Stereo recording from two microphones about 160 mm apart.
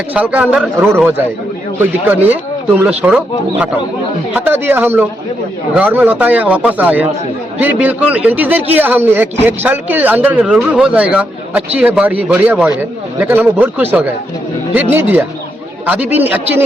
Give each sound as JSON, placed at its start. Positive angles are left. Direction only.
{"t": 0.1, "sound": "a man's voice", "side_deg": -10}